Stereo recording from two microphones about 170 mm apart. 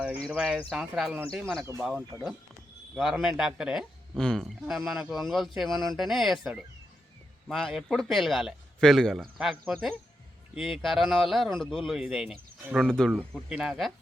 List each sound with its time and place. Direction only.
0.3 s a man's voice: 5° right (ahead or behind)
2.9 s a man's voice: centre (ahead or behind)